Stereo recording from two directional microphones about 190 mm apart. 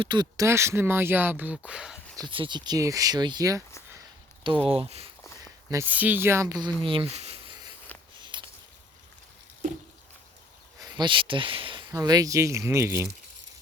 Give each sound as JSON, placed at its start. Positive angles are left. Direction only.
{"t": 0.0, "sound": "speech", "side_deg": -25}
{"t": 2.1, "sound": "speech", "side_deg": -25}
{"t": 4.6, "sound": "speech", "side_deg": -30}
{"t": 5.7, "sound": "speech", "side_deg": -10}
{"t": 8.2, "sound": "walk", "side_deg": -25}
{"t": 10.8, "sound": "speech", "side_deg": -20}